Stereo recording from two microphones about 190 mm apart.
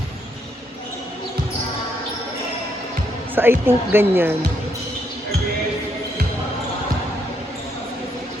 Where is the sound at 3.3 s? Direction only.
10° right (ahead or behind).